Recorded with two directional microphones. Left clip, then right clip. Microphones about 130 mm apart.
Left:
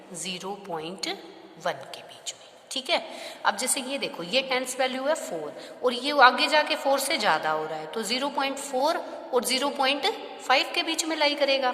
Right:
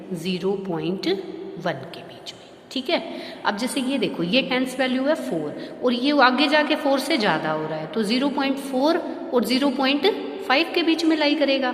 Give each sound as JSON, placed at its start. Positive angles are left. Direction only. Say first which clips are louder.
{"t": 0.3, "sound": "a woman's voice", "louder": "right 8 dB", "side_deg": 35}